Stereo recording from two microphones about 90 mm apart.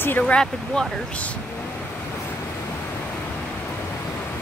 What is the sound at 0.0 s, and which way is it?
Speech, 20° left (ahead or behind).